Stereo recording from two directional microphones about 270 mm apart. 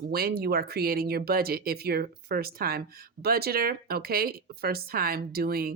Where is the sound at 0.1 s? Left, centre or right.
Right.